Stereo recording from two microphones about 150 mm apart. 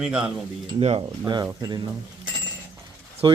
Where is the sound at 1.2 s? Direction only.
25° right (ahead or behind).